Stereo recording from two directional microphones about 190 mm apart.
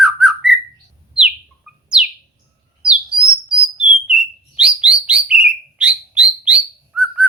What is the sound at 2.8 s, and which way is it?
Bird, 30° right (ahead or behind).